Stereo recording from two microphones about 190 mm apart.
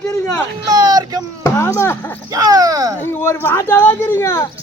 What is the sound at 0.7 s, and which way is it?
Speech, 20° right (ahead or behind).